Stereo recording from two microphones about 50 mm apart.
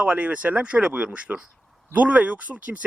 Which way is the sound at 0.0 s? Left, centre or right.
Right.